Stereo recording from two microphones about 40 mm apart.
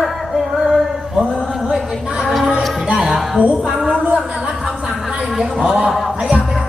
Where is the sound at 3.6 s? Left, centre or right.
Centre.